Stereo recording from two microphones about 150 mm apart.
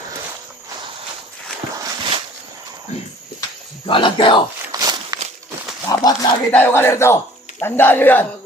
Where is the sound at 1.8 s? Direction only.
30° right (ahead or behind).